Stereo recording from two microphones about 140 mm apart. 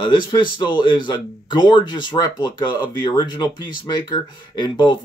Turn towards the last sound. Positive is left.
turn(degrees=35)  # may be behind; listen again after turning